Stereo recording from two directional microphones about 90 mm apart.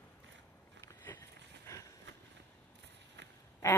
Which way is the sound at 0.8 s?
30° left (ahead or behind).